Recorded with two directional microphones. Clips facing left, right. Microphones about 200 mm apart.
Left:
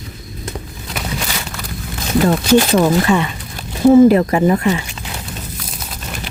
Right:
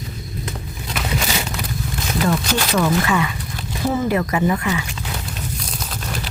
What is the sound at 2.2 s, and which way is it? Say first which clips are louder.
Speech: left 8 dB; 30° left (ahead or behind).